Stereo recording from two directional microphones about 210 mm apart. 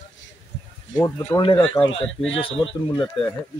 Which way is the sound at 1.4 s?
25° left (ahead or behind).